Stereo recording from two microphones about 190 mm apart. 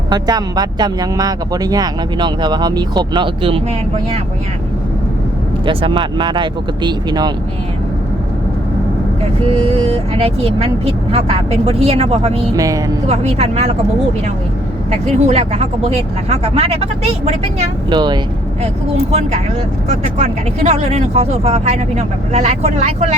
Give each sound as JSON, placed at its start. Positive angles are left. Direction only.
{"t": 0.1, "sound": "speech", "side_deg": -20}
{"t": 5.6, "sound": "speech", "side_deg": -25}
{"t": 9.6, "sound": "speech", "side_deg": -30}
{"t": 12.5, "sound": "speech", "side_deg": -15}
{"t": 13.1, "sound": "speech", "side_deg": -35}
{"t": 14.8, "sound": "speech", "side_deg": -35}
{"t": 17.8, "sound": "speech", "side_deg": -25}
{"t": 19.9, "sound": "speech", "side_deg": -35}